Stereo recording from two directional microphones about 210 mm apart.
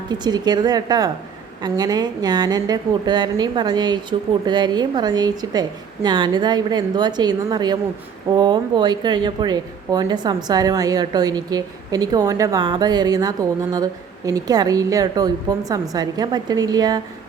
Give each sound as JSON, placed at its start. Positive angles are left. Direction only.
{"t": 0.1, "sound": "speech", "side_deg": -20}